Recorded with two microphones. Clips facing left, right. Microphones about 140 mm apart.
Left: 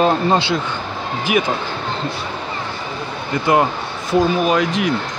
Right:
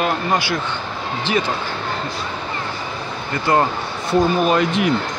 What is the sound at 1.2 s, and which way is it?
Speech, 15° left (ahead or behind).